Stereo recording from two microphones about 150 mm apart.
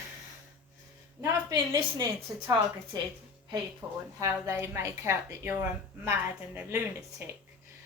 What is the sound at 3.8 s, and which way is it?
Speech, 10° right (ahead or behind).